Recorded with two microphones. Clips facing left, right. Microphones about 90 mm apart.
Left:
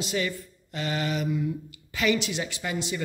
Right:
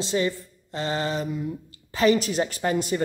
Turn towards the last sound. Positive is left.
turn(degrees=-45)  # may be behind; listen again after turning